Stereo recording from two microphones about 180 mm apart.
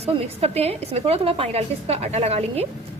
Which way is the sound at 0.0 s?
35° right (ahead or behind).